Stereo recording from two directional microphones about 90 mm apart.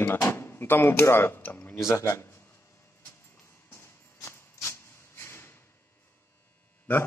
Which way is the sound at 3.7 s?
30° left (ahead or behind).